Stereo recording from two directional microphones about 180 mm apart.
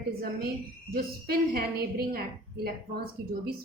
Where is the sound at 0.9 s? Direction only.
55° right (ahead or behind).